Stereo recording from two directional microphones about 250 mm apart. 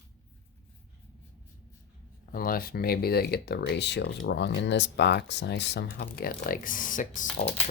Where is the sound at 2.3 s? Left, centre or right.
Left.